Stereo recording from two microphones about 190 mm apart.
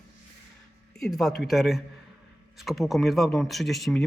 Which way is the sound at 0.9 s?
Centre (ahead or behind).